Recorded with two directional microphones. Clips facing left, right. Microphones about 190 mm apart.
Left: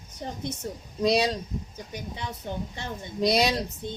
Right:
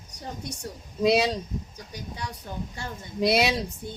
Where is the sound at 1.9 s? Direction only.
20° left (ahead or behind).